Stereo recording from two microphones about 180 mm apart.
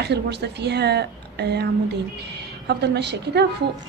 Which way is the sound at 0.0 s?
70° right (ahead or behind).